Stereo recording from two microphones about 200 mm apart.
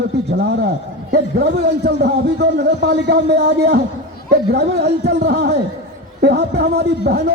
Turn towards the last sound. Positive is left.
turn(degrees=-55)  # may be behind; listen again after turning